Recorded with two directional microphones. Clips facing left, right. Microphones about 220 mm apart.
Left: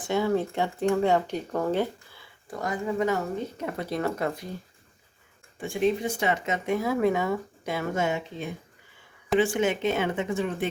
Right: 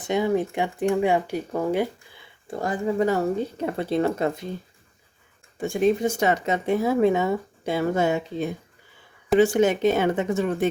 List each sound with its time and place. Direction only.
0.1 s speech: 15° right (ahead or behind)
2.5 s speech: 30° right (ahead or behind)
5.5 s speech: 45° right (ahead or behind)